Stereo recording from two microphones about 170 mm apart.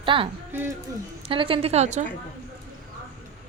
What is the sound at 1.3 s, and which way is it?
Speech, 30° right (ahead or behind).